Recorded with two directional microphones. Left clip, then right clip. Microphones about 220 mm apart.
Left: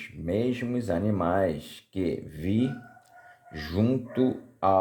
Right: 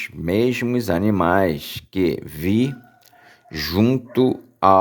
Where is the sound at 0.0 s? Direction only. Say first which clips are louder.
Right 9 dB; 40° right (ahead or behind).